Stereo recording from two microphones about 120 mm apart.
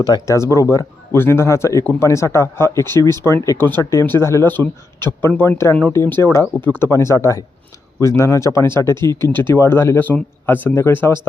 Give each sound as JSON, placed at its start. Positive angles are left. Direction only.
{"t": 0.0, "sound": "speech", "side_deg": 30}